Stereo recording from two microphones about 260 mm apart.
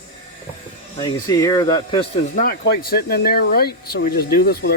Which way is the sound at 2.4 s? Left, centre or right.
Left.